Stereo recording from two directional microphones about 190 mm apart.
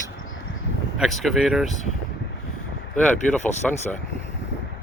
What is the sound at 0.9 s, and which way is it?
Speech, centre (ahead or behind).